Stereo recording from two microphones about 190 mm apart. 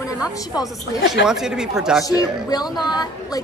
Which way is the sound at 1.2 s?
5° right (ahead or behind).